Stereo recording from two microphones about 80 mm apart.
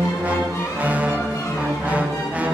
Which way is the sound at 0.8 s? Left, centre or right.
Centre.